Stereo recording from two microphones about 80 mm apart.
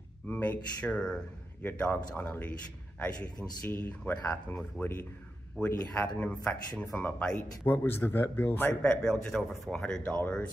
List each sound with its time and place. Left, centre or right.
0.3 s speech: centre
3.0 s speech: centre
8.8 s speech: centre